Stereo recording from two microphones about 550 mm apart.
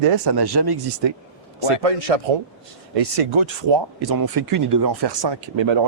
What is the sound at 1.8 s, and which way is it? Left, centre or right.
A man's voice, right.